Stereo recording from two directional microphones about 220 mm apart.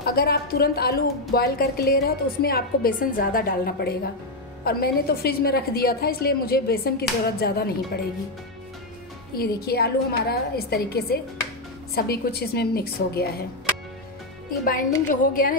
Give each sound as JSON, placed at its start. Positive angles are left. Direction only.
{"t": 0.0, "sound": "a woman's voice", "side_deg": 45}
{"t": 9.3, "sound": "a woman's voice", "side_deg": 45}
{"t": 14.6, "sound": "a woman's voice", "side_deg": 40}